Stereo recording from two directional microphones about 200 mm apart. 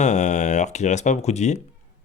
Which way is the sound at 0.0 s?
35° left (ahead or behind).